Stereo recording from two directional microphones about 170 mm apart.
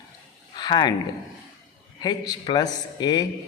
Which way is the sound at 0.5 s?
25° left (ahead or behind).